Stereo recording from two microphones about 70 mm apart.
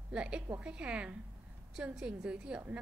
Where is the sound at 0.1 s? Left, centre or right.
Centre.